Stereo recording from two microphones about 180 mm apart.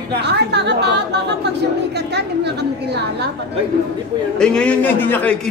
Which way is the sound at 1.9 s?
70° right (ahead or behind).